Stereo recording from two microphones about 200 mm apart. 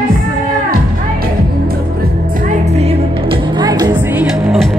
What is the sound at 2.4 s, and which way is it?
Music, 30° right (ahead or behind).